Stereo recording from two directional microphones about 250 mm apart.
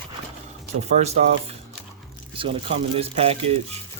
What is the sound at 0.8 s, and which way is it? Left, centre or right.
Speech, right.